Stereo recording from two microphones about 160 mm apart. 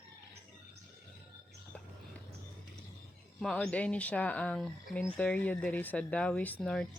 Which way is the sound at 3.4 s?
Centre (ahead or behind).